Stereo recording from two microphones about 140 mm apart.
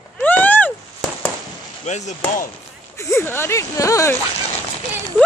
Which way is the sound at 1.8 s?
55° left (ahead or behind).